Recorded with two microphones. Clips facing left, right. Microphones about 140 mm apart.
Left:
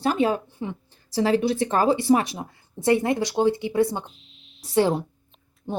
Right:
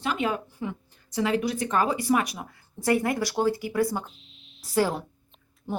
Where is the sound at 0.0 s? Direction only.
35° left (ahead or behind).